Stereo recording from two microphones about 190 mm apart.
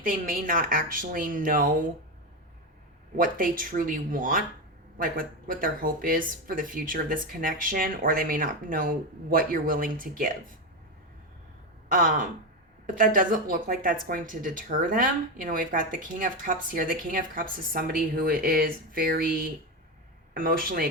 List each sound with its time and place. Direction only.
0.0 s speech: 45° right (ahead or behind)
3.2 s speech: 45° right (ahead or behind)
11.9 s speech: 45° right (ahead or behind)